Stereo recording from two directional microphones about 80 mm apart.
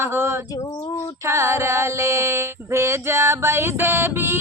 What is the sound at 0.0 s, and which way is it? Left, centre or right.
Female singing, right.